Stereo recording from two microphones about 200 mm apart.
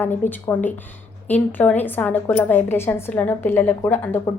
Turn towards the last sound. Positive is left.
turn(degrees=10)  # may be behind; listen again after turning